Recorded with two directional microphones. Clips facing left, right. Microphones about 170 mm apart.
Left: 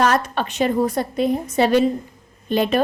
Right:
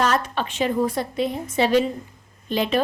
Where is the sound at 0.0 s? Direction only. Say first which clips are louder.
Left 3 dB; 50° left (ahead or behind).